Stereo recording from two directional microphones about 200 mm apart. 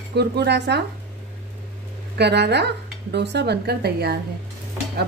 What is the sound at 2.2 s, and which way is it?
Speech, 55° right (ahead or behind).